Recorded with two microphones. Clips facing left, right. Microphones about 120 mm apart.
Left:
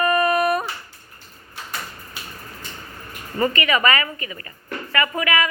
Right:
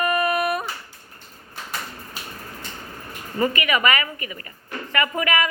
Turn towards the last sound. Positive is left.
turn(degrees=-20)  # may be behind; listen again after turning